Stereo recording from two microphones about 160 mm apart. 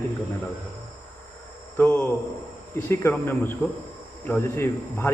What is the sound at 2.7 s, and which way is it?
A man's voice, 15° left (ahead or behind).